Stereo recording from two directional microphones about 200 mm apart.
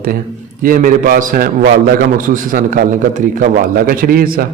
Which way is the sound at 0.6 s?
45° right (ahead or behind).